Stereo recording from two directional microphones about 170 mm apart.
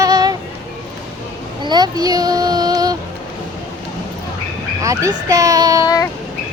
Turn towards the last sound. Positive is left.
turn(degrees=-20)  # may be behind; listen again after turning